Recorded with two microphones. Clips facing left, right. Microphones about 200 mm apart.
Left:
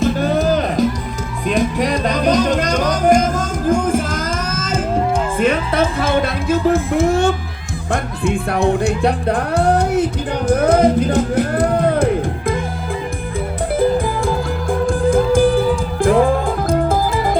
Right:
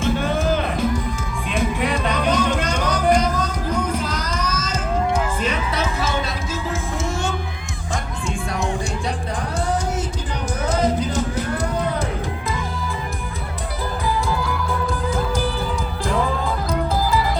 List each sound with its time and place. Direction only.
0.0 s music: 40° left (ahead or behind); by 7.3 s 60° left (ahead or behind)
8.2 s speech: 60° left (ahead or behind)
10.5 s music: 55° left (ahead or behind)
13.7 s music: 50° left (ahead or behind)